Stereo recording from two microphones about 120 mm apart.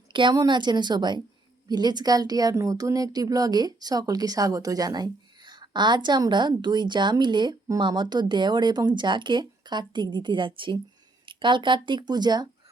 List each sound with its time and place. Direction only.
0.1 s speech: 40° right (ahead or behind)